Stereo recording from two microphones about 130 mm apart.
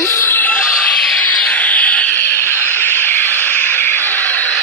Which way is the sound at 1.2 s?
10° left (ahead or behind).